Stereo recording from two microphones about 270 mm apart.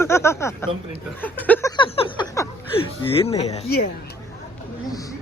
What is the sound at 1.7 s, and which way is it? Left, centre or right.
Speech, centre.